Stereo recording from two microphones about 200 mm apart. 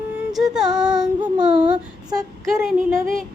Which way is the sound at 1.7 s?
20° right (ahead or behind).